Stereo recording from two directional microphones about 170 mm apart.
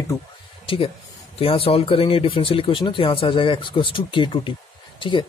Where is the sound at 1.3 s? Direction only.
35° left (ahead or behind).